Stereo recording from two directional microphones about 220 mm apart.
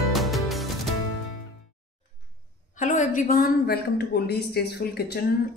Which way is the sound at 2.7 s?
35° left (ahead or behind).